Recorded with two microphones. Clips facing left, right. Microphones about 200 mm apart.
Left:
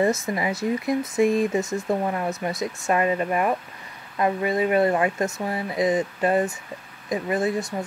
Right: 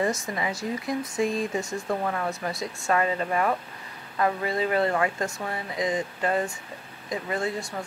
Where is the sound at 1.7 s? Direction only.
20° left (ahead or behind).